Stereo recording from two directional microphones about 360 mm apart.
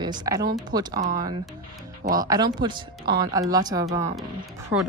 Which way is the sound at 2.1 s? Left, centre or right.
Centre.